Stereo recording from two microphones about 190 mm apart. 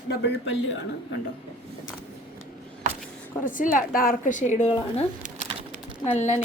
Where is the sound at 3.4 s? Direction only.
45° left (ahead or behind).